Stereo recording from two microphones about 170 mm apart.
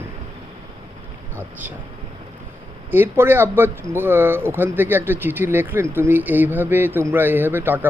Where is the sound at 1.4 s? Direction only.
10° right (ahead or behind).